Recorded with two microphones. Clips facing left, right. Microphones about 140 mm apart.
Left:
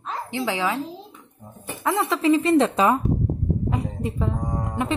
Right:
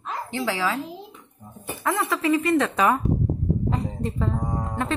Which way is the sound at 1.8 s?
25° left (ahead or behind).